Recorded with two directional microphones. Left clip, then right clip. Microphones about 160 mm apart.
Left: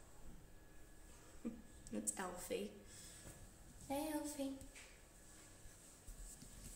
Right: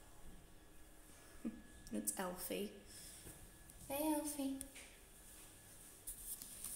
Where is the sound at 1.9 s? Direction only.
30° right (ahead or behind).